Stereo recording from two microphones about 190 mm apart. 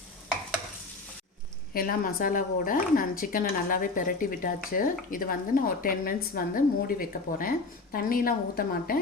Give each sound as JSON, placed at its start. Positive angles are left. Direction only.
{"t": 1.7, "sound": "a woman's voice", "side_deg": 50}